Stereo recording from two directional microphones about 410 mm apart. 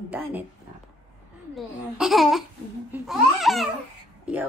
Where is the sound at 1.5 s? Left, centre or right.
Centre.